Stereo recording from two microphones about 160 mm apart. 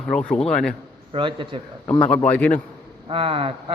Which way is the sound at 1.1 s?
30° right (ahead or behind).